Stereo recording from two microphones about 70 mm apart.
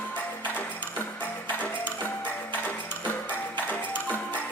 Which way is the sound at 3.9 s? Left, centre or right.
Left.